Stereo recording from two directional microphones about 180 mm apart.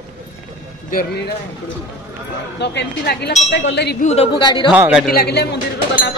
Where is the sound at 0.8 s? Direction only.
50° left (ahead or behind).